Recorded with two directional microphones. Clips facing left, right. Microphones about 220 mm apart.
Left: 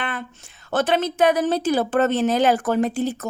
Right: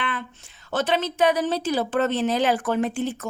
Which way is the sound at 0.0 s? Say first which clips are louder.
Left 1 dB; 45° left (ahead or behind).